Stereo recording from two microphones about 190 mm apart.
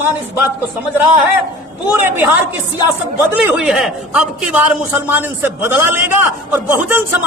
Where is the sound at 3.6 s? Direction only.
Centre (ahead or behind).